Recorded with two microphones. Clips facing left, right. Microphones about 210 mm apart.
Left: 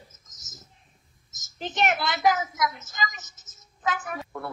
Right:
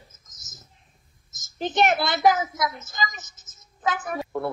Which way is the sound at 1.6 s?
35° right (ahead or behind).